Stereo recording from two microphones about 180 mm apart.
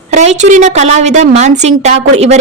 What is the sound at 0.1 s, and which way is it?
A woman's voice, 40° right (ahead or behind).